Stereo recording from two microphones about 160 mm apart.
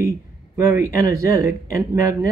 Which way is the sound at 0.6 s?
20° right (ahead or behind).